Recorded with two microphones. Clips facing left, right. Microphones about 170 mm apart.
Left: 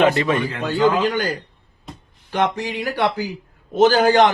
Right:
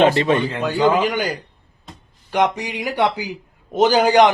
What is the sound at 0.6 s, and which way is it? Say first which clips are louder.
A man's voice: right 1 dB; 15° right (ahead or behind).